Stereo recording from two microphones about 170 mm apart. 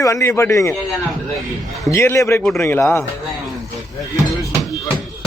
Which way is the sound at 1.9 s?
15° left (ahead or behind).